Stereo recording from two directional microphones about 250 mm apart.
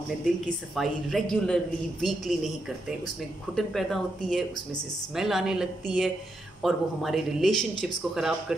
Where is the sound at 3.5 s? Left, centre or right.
Centre.